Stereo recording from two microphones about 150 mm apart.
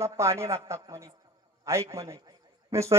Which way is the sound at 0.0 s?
20° right (ahead or behind).